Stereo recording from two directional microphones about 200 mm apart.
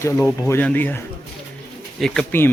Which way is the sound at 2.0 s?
5° left (ahead or behind).